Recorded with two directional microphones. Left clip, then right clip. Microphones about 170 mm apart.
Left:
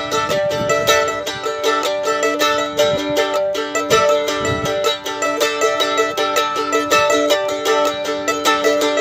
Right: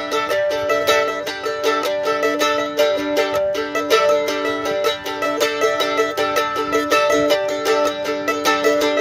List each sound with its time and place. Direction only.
0.3 s music: 30° left (ahead or behind)
5.4 s music: 30° left (ahead or behind)